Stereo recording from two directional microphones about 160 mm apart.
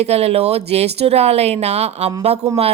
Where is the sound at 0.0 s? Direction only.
40° right (ahead or behind).